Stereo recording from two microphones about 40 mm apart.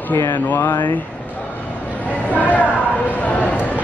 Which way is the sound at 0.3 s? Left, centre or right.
Left.